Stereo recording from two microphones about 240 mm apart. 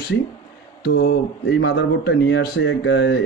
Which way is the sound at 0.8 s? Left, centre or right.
Left.